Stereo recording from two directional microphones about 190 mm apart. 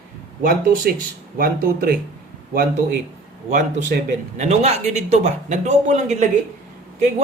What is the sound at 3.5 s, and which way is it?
Speech, 40° right (ahead or behind).